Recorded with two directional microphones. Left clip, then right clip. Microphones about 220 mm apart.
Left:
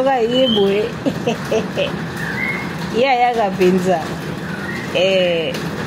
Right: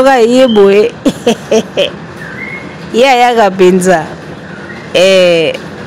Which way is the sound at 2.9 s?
40° right (ahead or behind).